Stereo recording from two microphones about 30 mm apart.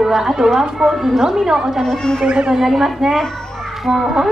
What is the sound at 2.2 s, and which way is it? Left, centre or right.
Speech, right.